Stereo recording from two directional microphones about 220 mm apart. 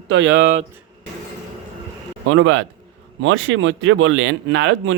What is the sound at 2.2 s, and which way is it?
Speech, 60° right (ahead or behind).